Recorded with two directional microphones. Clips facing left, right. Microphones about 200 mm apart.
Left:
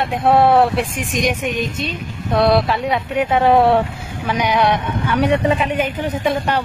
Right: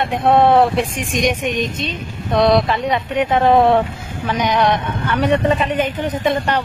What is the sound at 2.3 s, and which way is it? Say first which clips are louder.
A man's voice: right 1 dB; 5° left (ahead or behind).